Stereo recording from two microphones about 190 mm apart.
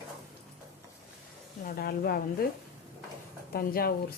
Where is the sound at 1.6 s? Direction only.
50° left (ahead or behind).